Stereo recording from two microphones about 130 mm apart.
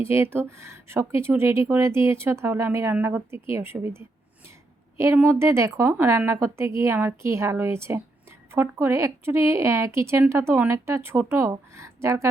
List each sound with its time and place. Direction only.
0.0 s speech: 20° right (ahead or behind)